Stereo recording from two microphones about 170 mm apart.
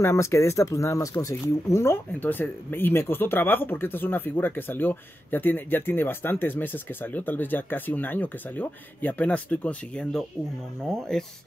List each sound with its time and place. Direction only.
0.0 s speech: 15° left (ahead or behind)